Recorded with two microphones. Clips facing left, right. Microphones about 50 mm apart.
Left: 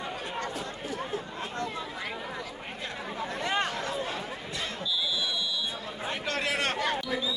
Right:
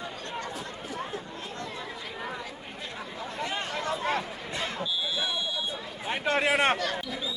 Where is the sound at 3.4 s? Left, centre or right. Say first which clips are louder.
Left 4 dB; left.